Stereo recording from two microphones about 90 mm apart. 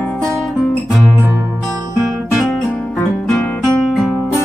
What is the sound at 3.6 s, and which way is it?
Music, centre (ahead or behind).